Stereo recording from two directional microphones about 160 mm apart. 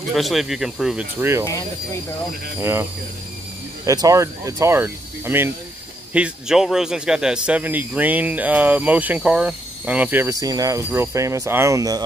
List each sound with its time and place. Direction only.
0.1 s speech: centre (ahead or behind)
2.6 s speech: 15° right (ahead or behind)